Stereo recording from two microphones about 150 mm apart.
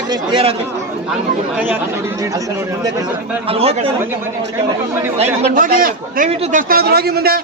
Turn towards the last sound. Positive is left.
turn(degrees=-90)